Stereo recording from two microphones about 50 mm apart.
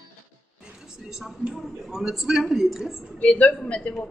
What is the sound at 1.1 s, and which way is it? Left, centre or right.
A woman's voice, centre.